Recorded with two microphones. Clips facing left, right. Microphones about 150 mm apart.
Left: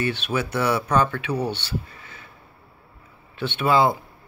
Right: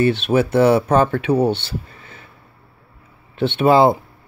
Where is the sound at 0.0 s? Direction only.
30° right (ahead or behind).